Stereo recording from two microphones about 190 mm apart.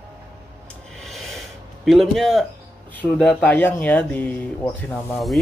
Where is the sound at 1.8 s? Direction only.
Centre (ahead or behind).